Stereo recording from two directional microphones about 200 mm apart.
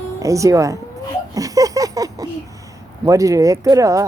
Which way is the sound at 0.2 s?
15° right (ahead or behind).